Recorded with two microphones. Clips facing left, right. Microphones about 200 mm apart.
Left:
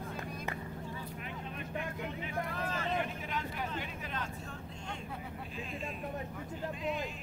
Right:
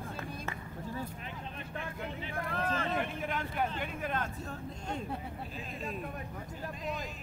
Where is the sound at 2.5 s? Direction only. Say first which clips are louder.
Right 6 dB; 50° right (ahead or behind).